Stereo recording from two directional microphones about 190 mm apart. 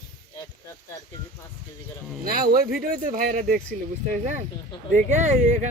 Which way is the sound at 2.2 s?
50° right (ahead or behind).